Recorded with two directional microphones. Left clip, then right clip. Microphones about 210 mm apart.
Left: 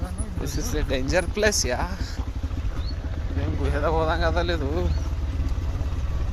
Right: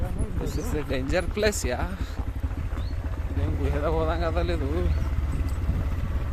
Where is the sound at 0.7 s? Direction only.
5° right (ahead or behind).